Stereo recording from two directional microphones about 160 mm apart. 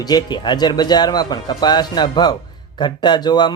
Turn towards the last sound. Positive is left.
turn(degrees=25)  # may be behind; listen again after turning